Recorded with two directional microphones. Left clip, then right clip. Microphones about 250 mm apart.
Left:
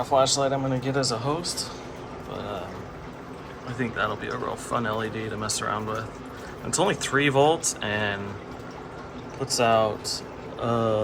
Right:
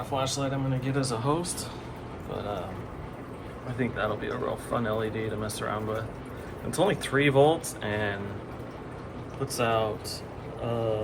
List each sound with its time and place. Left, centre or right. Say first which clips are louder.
0.1 s speech: left 9 dB; left; by 1.6 s centre
3.8 s speech: left 2 dB; centre
9.6 s speech: left 6 dB; centre
10.6 s a sound: left 6 dB; left